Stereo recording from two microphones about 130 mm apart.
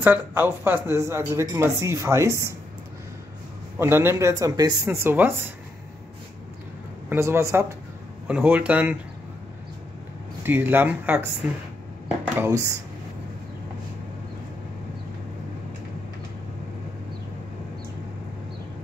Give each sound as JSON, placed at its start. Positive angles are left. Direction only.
{"t": 0.0, "sound": "speech", "side_deg": -15}
{"t": 3.7, "sound": "speech", "side_deg": -15}
{"t": 7.1, "sound": "speech", "side_deg": -20}
{"t": 8.3, "sound": "speech", "side_deg": -10}
{"t": 10.4, "sound": "speech", "side_deg": -15}
{"t": 12.4, "sound": "speech", "side_deg": -25}